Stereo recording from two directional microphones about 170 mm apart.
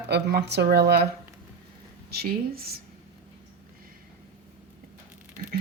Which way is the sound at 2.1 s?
65° right (ahead or behind).